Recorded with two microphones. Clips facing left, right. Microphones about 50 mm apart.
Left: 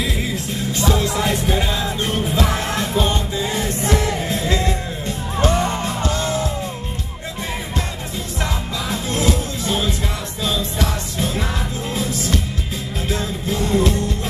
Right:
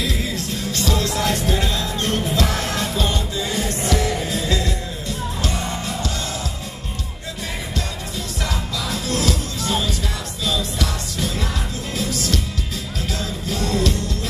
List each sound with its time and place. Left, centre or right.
0.7 s music: centre
8.9 s music: left